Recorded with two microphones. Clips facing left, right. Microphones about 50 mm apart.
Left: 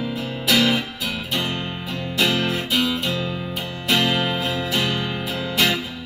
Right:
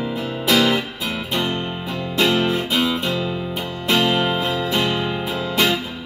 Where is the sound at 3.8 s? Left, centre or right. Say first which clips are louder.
Right 2 dB; right.